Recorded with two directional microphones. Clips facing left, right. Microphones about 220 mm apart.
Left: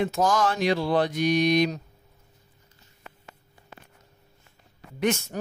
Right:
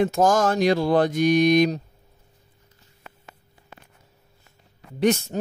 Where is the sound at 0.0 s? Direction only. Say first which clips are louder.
Right 4 dB; 50° right (ahead or behind).